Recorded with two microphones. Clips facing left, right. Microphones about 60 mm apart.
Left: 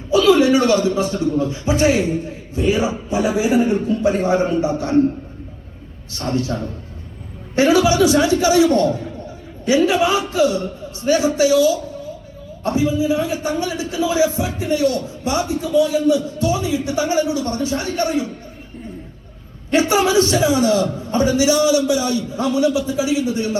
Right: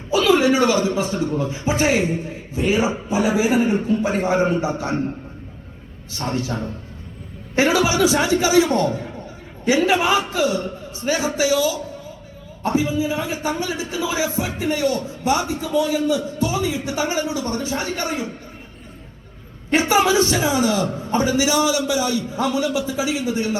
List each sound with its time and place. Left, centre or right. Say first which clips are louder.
0.2 s a man's voice: left 3 dB; right
6.1 s a man's voice: left 3 dB; right
7.6 s a man's voice: left 3 dB; right
9.7 s a man's voice: left 2 dB; right
12.6 s a man's voice: left 2 dB; right
19.7 s a man's voice: left 1 dB; right